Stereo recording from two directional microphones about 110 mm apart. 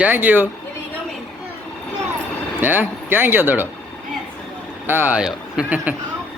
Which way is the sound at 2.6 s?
15° right (ahead or behind).